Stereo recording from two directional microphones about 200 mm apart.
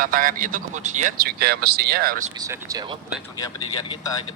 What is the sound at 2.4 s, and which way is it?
Speech, 15° right (ahead or behind).